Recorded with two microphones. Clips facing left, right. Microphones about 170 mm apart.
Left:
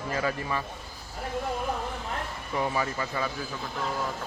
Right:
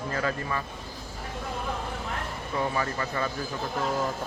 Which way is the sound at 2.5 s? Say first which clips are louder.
Even; 15° left (ahead or behind).